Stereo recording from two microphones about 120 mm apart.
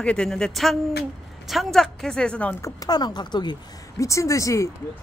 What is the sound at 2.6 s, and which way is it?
Speech, 30° left (ahead or behind).